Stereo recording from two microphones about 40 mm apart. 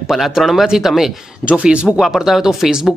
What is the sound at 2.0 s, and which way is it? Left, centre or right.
Speech, centre.